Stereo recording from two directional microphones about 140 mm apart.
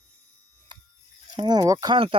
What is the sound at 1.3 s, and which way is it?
Speech, 30° right (ahead or behind).